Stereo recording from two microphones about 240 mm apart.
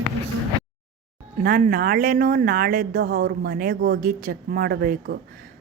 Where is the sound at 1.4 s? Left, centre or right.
Right.